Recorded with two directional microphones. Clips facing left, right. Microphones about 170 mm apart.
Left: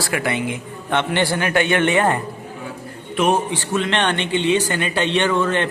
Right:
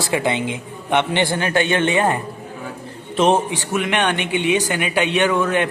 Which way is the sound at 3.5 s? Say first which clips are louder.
Even; 15° right (ahead or behind).